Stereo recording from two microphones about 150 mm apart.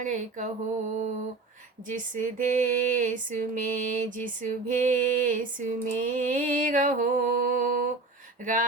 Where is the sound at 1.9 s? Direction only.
60° right (ahead or behind).